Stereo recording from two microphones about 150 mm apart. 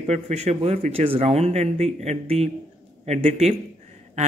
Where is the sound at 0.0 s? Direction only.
45° right (ahead or behind).